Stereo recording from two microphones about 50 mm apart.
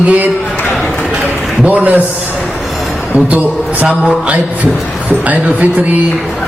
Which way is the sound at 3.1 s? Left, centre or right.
Right.